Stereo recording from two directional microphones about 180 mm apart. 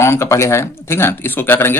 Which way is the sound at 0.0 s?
15° left (ahead or behind).